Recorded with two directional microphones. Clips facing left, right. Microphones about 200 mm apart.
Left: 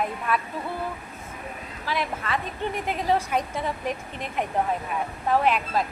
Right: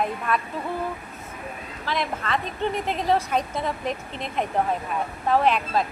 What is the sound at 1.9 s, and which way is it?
A woman's voice, 10° left (ahead or behind).